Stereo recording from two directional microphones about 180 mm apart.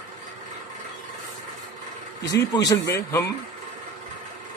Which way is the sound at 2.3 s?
20° left (ahead or behind).